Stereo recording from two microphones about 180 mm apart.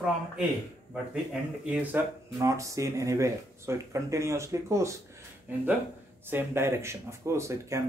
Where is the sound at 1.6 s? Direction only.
10° right (ahead or behind).